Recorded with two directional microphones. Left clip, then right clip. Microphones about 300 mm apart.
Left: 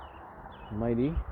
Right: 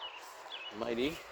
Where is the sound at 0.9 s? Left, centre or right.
Centre.